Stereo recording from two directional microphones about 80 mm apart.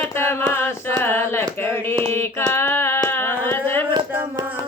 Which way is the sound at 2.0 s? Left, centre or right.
Left.